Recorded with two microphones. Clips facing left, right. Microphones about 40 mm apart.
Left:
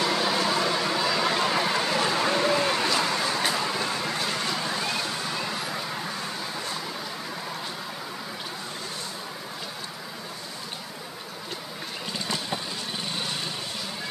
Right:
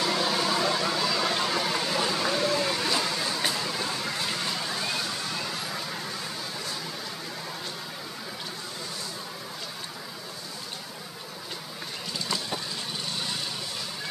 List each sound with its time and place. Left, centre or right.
0.0 s vehicle: centre
12.1 s vehicle: left